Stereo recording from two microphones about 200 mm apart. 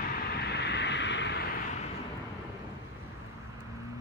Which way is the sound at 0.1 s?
50° left (ahead or behind).